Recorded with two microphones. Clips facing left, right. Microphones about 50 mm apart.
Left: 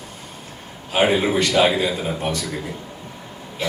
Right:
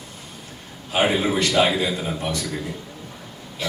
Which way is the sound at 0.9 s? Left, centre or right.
Left.